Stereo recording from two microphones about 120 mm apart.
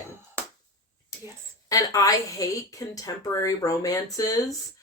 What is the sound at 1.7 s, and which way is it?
Speech, 30° left (ahead or behind).